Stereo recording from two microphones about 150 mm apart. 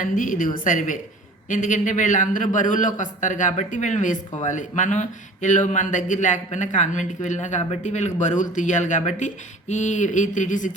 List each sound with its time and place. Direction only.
0.0 s a man's voice: 60° left (ahead or behind)